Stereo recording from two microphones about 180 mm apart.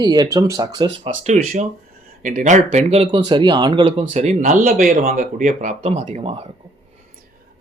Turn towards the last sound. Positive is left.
turn(degrees=-35)  # may be behind; listen again after turning